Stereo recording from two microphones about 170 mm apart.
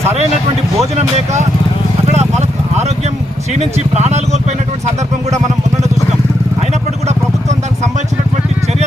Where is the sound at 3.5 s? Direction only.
40° right (ahead or behind).